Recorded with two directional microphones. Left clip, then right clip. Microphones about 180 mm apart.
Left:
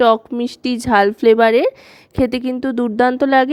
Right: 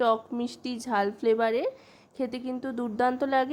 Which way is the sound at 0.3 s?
40° left (ahead or behind).